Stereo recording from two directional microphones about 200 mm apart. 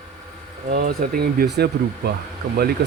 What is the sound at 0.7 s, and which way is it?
Speech, 50° right (ahead or behind).